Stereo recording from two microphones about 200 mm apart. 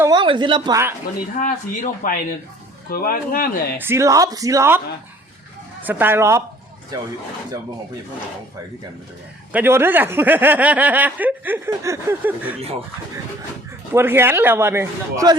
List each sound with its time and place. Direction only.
0.0 s speech: 20° right (ahead or behind)
1.5 s speech: 45° left (ahead or behind)
3.8 s speech: 15° right (ahead or behind)
5.8 s speech: 10° right (ahead or behind)
9.5 s speech: 10° right (ahead or behind)
13.9 s speech: 10° right (ahead or behind)